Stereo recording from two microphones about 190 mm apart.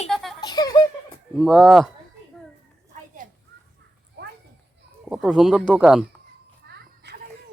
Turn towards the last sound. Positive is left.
turn(degrees=-60)  # may be behind; listen again after turning